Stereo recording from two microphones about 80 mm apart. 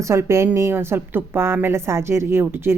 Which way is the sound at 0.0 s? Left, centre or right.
Right.